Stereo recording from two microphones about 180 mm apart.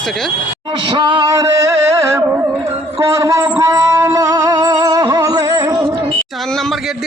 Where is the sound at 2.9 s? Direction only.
15° right (ahead or behind).